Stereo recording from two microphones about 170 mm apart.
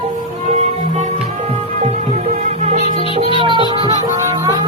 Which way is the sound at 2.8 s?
30° left (ahead or behind).